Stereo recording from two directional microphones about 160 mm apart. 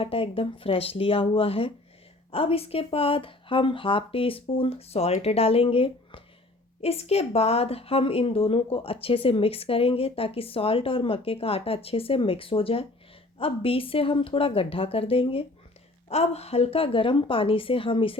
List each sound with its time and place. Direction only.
0.0 s a woman's voice: 35° left (ahead or behind)